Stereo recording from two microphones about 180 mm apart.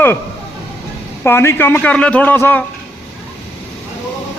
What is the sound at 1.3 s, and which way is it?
Speech, 10° left (ahead or behind).